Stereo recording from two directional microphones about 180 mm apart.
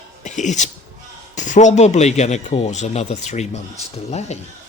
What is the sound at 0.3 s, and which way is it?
Speech, 40° left (ahead or behind).